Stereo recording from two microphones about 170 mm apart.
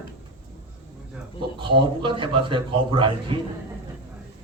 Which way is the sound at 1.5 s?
30° right (ahead or behind).